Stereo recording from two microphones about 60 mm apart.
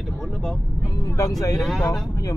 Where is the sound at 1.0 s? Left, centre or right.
Left.